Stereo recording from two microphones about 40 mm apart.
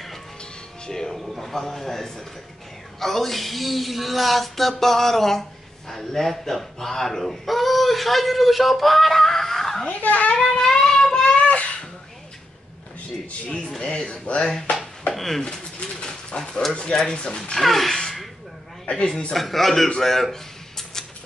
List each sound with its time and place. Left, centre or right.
0.8 s music: centre
1.1 s a man's voice: centre
9.8 s a child's voice: left
10.6 s child singing: centre
11.2 s a sound: left
13.7 s speech: left
15.1 s speech: centre
15.8 s bird: left
17.1 s speech: left
17.6 s speech: centre
18.9 s speech: left
19.3 s speech: centre
20.0 s a sound: centre